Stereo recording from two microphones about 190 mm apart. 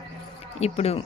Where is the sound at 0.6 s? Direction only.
35° left (ahead or behind).